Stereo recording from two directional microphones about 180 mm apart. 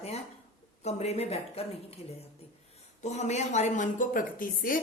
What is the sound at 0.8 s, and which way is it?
Speech, 35° left (ahead or behind).